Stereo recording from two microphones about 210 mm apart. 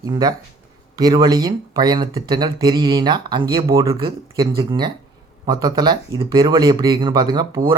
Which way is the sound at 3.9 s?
25° right (ahead or behind).